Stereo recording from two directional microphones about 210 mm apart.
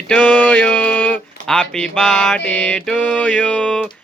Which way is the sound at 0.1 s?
5° left (ahead or behind).